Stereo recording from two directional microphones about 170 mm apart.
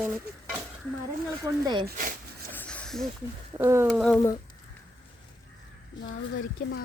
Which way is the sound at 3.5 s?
15° right (ahead or behind).